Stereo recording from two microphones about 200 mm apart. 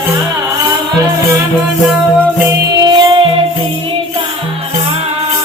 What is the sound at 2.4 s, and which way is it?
Music, 20° right (ahead or behind).